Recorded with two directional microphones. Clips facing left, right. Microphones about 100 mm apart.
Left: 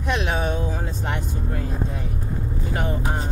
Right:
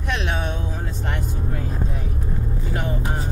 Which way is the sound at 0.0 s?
5° left (ahead or behind).